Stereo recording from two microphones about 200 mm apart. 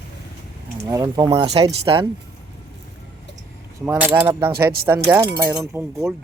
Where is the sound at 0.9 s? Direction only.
15° right (ahead or behind).